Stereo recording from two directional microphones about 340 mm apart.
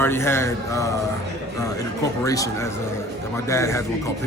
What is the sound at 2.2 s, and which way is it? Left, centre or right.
A man's voice, centre.